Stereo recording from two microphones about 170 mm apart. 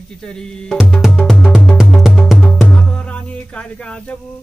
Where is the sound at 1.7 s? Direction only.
Centre (ahead or behind).